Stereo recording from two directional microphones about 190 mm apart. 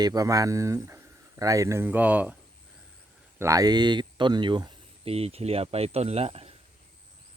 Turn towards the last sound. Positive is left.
turn(degrees=-30)  # may be behind; listen again after turning